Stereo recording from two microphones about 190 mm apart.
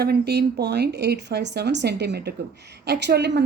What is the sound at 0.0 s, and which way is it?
A woman's voice, 55° right (ahead or behind).